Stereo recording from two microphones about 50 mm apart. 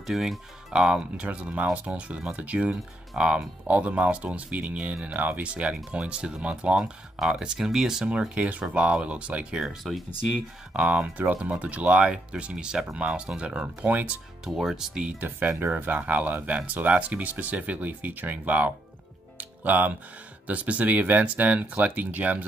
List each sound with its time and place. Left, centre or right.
0.0 s speech: centre
0.7 s speech: centre
8.1 s speech: right
13.8 s speech: right
14.4 s speech: centre
15.0 s speech: right
19.3 s music: right
20.4 s speech: right